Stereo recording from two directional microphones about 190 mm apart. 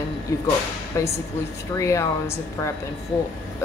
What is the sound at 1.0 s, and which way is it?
Speech, 15° left (ahead or behind).